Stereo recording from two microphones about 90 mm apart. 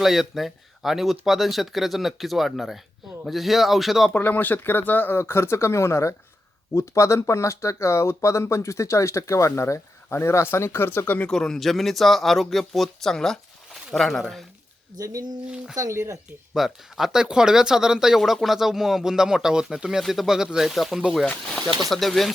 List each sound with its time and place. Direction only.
0.0 s speech: 5° right (ahead or behind)
4.1 s speech: 20° left (ahead or behind)
11.3 s speech: 5° left (ahead or behind)
14.9 s speech: 40° right (ahead or behind)
15.4 s speech: 10° right (ahead or behind)
15.7 s speech: 35° right (ahead or behind)
16.6 s speech: 5° right (ahead or behind)